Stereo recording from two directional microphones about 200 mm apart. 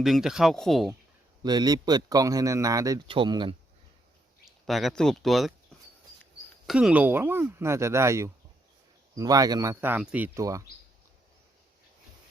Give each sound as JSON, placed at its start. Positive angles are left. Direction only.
{"t": 0.0, "sound": "speech", "side_deg": 0}
{"t": 1.4, "sound": "a man's voice", "side_deg": -20}
{"t": 4.4, "sound": "speech", "side_deg": 0}
{"t": 6.7, "sound": "speech", "side_deg": -5}